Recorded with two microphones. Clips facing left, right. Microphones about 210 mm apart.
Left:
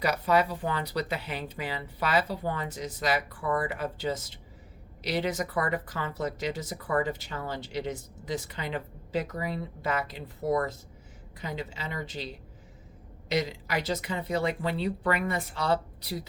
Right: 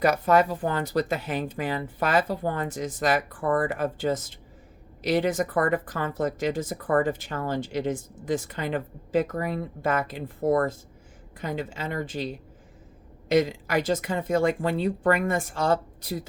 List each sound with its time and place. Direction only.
0.0 s speech: 50° right (ahead or behind)